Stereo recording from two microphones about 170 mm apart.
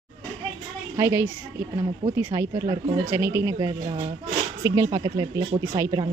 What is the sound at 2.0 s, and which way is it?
Speech, 45° right (ahead or behind).